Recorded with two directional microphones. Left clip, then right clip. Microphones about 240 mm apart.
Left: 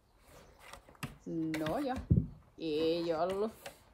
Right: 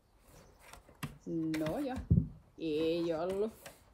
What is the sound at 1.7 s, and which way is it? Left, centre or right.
Speech, left.